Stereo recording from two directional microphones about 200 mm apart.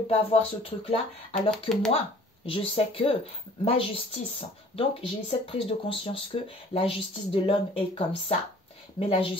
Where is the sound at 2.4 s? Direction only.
30° left (ahead or behind).